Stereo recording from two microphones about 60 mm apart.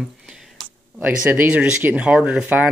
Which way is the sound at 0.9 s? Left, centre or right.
Right.